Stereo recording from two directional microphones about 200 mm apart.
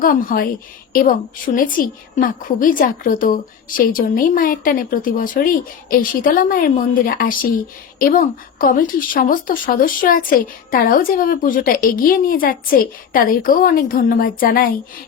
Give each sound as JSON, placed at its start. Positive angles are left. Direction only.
{"t": 0.0, "sound": "speech", "side_deg": 45}
{"t": 1.5, "sound": "speech", "side_deg": 45}